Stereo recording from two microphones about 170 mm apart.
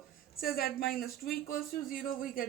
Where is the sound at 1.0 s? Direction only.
65° left (ahead or behind).